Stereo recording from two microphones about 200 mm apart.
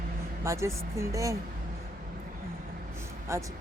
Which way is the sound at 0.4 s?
15° right (ahead or behind).